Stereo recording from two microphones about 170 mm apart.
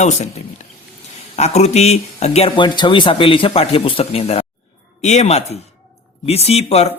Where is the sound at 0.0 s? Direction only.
40° left (ahead or behind).